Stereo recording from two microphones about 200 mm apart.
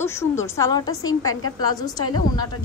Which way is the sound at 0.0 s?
15° left (ahead or behind).